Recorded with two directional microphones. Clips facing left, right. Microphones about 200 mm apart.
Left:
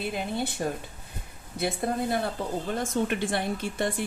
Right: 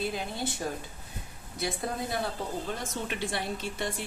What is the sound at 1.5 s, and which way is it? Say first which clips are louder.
A woman's voice: left 5 dB; 55° left (ahead or behind).